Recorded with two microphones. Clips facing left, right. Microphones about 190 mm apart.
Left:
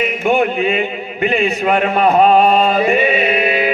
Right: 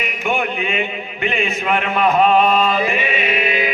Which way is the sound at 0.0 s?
35° left (ahead or behind).